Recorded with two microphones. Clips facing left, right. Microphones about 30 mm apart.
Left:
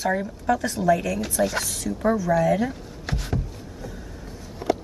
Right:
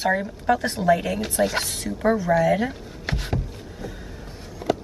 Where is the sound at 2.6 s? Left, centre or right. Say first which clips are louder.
Even; right.